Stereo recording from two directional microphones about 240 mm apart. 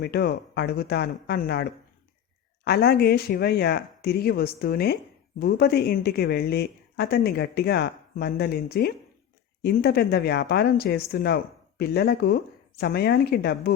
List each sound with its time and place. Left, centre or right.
0.0 s a woman's voice: left
2.6 s a woman's voice: left